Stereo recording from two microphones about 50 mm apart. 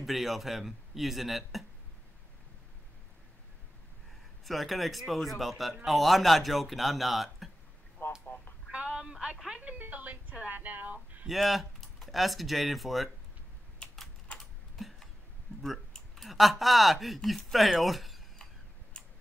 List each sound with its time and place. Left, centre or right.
0.0 s speech: centre
4.5 s speech: centre
8.0 s a sound: left
8.7 s a sound: centre
9.6 s speech: right
11.2 s speech: centre
14.4 s typing: centre
16.2 s speech: centre
18.9 s tick-tock: centre